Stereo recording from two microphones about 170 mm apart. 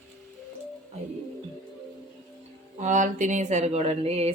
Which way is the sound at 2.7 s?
45° right (ahead or behind).